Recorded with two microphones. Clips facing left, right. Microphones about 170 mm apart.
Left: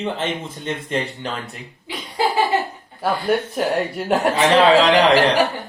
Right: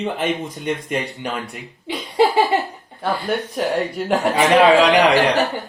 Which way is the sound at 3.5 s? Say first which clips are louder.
Even; 5° left (ahead or behind).